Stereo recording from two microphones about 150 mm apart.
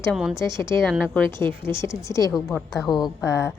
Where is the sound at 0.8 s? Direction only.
5° left (ahead or behind).